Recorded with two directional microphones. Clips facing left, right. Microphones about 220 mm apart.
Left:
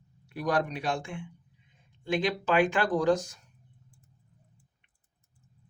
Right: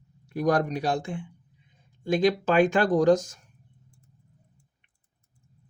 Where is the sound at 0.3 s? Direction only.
45° right (ahead or behind).